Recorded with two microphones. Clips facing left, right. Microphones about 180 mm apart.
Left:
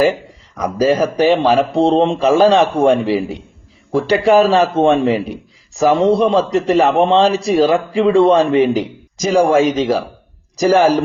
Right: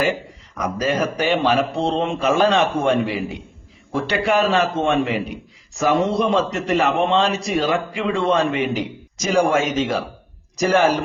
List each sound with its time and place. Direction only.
0.6 s a man's voice: 35° left (ahead or behind)